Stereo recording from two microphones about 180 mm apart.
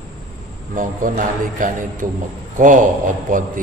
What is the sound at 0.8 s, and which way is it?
A man's voice, 45° right (ahead or behind).